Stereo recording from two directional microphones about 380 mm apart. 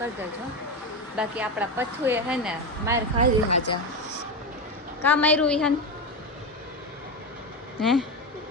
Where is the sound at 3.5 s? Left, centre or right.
Left.